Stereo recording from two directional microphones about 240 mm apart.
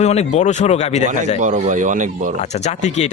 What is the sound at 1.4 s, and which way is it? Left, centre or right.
Speech, right.